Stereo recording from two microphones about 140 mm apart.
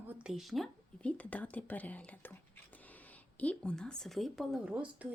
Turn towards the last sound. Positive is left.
turn(degrees=-10)  # may be behind; listen again after turning